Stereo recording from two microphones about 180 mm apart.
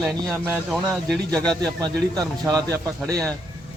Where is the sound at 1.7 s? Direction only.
20° right (ahead or behind).